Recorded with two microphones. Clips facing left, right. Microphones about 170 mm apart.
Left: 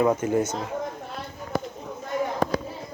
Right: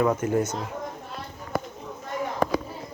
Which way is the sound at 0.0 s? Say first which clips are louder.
Left 1 dB; 10° left (ahead or behind).